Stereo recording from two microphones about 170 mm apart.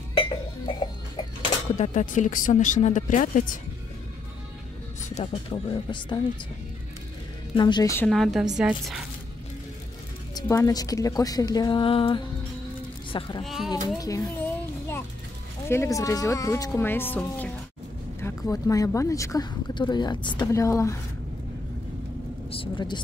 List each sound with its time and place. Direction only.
0.1 s a sound: 30° left (ahead or behind)
1.8 s speech: 45° left (ahead or behind)
5.1 s speech: 35° left (ahead or behind)
7.5 s a woman's voice: 25° left (ahead or behind)
8.1 s speech: centre (ahead or behind)
10.3 s a woman's voice: 20° left (ahead or behind)
13.4 s speech: centre (ahead or behind)
13.9 s a woman's voice: 20° left (ahead or behind)
14.4 s a sound: 15° left (ahead or behind)
15.7 s speech: 15° left (ahead or behind)
18.5 s a woman's voice: 20° left (ahead or behind)
22.5 s speech: 30° left (ahead or behind)